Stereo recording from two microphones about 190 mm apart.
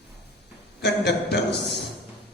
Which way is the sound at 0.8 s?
60° left (ahead or behind).